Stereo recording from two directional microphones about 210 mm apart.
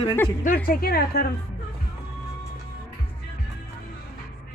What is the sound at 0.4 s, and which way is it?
Speech, 45° left (ahead or behind).